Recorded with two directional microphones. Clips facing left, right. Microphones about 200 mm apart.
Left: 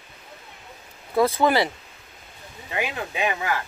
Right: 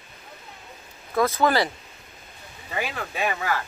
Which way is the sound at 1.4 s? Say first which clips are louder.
Right 1 dB; 20° left (ahead or behind).